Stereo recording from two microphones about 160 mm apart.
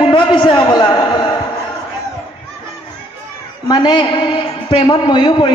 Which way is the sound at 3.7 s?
25° left (ahead or behind).